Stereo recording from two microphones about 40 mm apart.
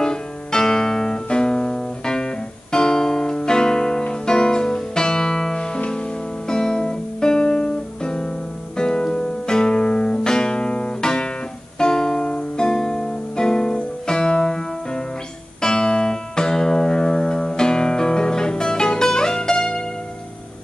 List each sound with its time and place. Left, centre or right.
0.0 s music: centre